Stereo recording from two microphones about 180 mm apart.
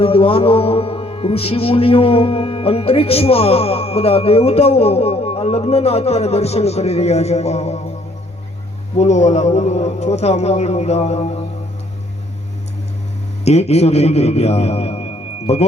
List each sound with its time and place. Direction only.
0.0 s speech: 30° left (ahead or behind)
9.0 s speech: 40° left (ahead or behind)
13.4 s speech: 35° left (ahead or behind)